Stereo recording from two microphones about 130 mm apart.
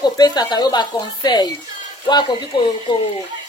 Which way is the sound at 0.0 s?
35° left (ahead or behind).